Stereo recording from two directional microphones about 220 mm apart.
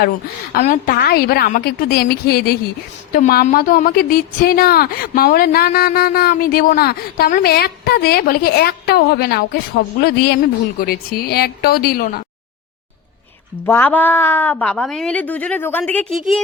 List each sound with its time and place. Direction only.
0.5 s a woman's voice: 40° left (ahead or behind)
13.7 s a woman's voice: 10° left (ahead or behind)